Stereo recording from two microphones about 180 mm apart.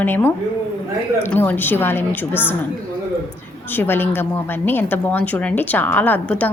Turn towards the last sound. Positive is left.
turn(degrees=10)  # may be behind; listen again after turning